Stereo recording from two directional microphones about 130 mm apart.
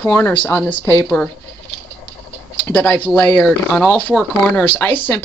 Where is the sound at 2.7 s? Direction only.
10° left (ahead or behind).